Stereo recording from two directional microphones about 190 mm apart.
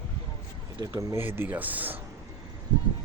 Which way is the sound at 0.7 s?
20° right (ahead or behind).